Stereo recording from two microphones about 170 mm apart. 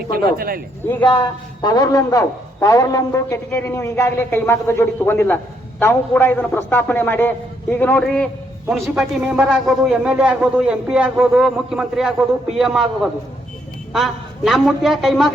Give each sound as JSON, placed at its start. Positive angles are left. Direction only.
{"t": 0.3, "sound": "speech", "side_deg": -60}
{"t": 1.6, "sound": "a man's voice", "side_deg": 25}
{"t": 8.7, "sound": "speech", "side_deg": -5}